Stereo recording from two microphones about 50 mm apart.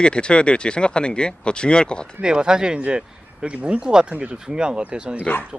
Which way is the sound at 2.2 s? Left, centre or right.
Centre.